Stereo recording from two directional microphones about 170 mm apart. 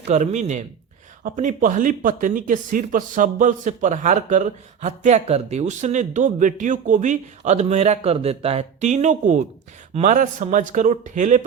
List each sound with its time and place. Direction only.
0.1 s speech: 45° right (ahead or behind)